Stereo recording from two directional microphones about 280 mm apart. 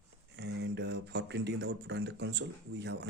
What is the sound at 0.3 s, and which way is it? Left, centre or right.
Speech, right.